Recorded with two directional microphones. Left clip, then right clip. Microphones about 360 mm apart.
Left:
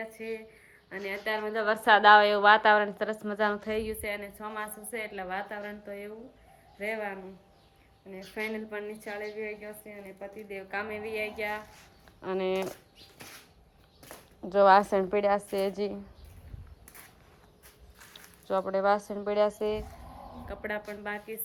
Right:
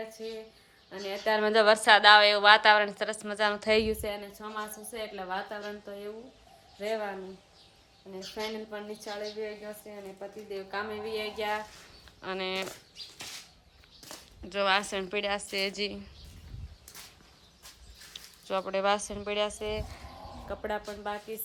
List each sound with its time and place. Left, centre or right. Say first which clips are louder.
0.9 s a woman's voice: even; centre
1.3 s a woman's voice: right 7 dB; right
1.6 s a woman's voice: even; centre
3.7 s a woman's voice: right 6 dB; centre
4.1 s a woman's voice: left 1 dB; centre
8.1 s a woman's voice: left 1 dB; centre
12.2 s a woman's voice: left 3 dB; centre
14.5 s a woman's voice: left 7 dB; centre
18.1 s speech: left 2 dB; centre
20.5 s a woman's voice: right 1 dB; centre